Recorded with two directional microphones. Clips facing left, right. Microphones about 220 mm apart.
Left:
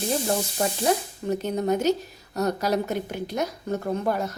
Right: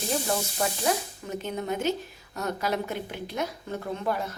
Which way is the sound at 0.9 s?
40° left (ahead or behind).